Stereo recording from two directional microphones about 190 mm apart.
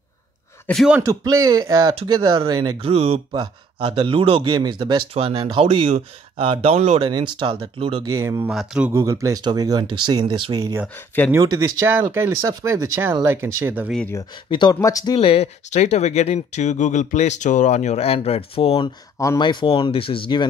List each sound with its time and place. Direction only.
0.7 s speech: centre (ahead or behind)
1.0 s speech: 15° right (ahead or behind)
8.2 s speech: 15° right (ahead or behind)
8.5 s speech: 5° right (ahead or behind)
8.9 s speech: 15° right (ahead or behind)
14.5 s speech: 20° left (ahead or behind)
15.1 s speech: 30° left (ahead or behind)